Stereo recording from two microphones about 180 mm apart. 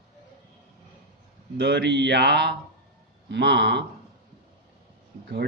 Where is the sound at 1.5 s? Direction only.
75° right (ahead or behind).